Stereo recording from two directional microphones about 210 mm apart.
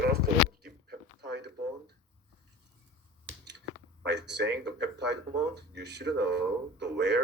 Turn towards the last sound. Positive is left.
turn(degrees=-55)  # may be behind; listen again after turning